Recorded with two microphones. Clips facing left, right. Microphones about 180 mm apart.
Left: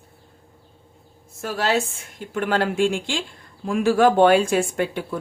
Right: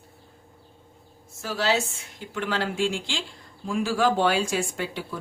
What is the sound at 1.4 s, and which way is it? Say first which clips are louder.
A woman's voice: left 3 dB; 55° left (ahead or behind).